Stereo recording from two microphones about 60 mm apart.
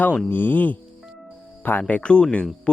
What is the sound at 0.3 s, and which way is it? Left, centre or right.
Speech, left.